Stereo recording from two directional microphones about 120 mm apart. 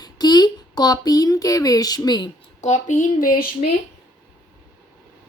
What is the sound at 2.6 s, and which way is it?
Speech, 85° left.